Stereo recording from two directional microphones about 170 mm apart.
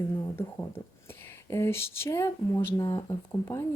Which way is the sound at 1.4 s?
15° left (ahead or behind).